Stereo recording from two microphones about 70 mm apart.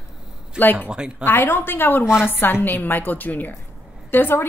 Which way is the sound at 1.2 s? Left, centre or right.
Left.